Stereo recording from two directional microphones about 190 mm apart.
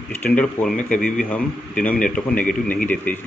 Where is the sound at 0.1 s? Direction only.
10° left (ahead or behind).